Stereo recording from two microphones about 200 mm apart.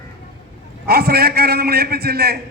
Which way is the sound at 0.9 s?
50° right (ahead or behind).